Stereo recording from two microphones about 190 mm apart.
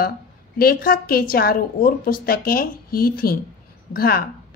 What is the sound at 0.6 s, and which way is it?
A woman's voice, 50° left (ahead or behind).